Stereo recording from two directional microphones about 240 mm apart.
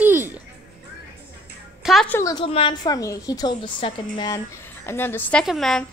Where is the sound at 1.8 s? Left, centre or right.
Centre.